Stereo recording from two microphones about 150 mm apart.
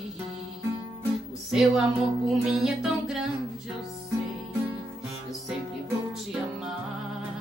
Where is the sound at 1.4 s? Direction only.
Centre (ahead or behind).